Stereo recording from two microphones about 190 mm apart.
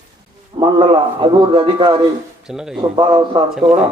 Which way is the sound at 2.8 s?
25° right (ahead or behind).